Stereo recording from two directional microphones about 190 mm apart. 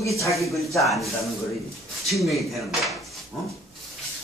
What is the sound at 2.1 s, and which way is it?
Speech, centre (ahead or behind).